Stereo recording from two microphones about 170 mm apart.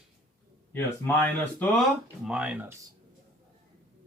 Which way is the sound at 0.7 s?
10° left (ahead or behind).